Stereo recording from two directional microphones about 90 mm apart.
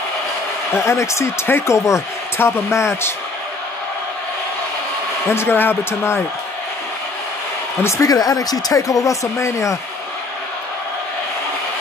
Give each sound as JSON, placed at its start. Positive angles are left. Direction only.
{"t": 0.7, "sound": "speech", "side_deg": 30}
{"t": 5.3, "sound": "speech", "side_deg": 25}
{"t": 7.8, "sound": "speech", "side_deg": 40}